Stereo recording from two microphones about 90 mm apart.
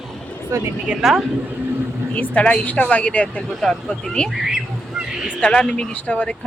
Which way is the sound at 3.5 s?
Centre (ahead or behind).